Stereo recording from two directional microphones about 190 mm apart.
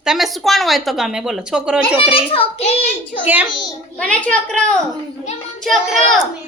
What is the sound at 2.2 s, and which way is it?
Speech, 30° left (ahead or behind).